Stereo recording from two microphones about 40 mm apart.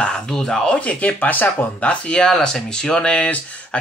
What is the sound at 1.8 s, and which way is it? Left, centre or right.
Speech, left.